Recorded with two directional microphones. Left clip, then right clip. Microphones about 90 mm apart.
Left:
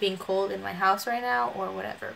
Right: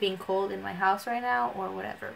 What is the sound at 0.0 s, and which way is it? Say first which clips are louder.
Speech: left 2 dB; 10° left (ahead or behind).